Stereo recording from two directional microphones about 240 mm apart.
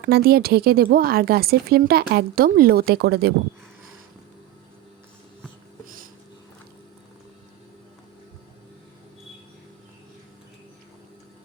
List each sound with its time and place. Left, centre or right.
0.0 s speech: right